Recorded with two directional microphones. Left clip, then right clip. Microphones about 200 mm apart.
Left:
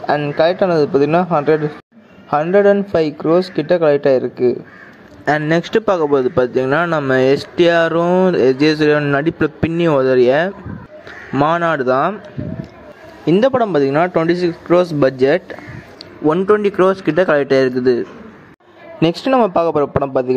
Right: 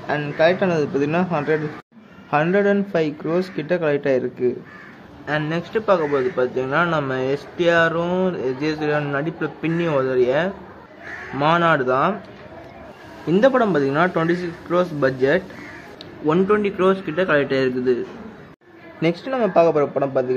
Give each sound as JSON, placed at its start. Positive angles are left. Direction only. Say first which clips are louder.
{"t": 0.0, "sound": "a man's voice", "louder": "left 4 dB", "side_deg": 30}
{"t": 5.5, "sound": "a man's voice", "louder": "left 1 dB", "side_deg": 35}
{"t": 13.4, "sound": "a man's voice", "louder": "left 2 dB", "side_deg": 30}